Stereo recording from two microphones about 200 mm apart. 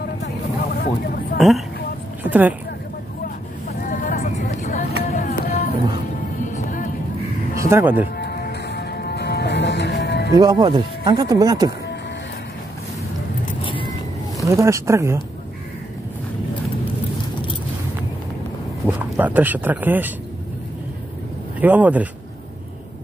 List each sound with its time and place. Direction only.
0.7 s speech: 50° left (ahead or behind)
2.2 s a sound: 10° right (ahead or behind)
3.8 s vehicle: 45° left (ahead or behind)
5.0 s a sound: 40° left (ahead or behind)
6.4 s music: 40° left (ahead or behind)
7.5 s speech: 10° right (ahead or behind)
8.2 s music: 55° left (ahead or behind)
10.3 s speech: 20° right (ahead or behind)
13.6 s vehicle: 25° left (ahead or behind)
14.4 s speech: 15° right (ahead or behind)
18.9 s speech: 10° right (ahead or behind)
21.5 s speech: 10° right (ahead or behind)